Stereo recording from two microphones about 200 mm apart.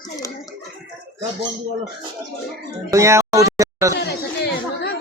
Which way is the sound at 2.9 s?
15° right (ahead or behind).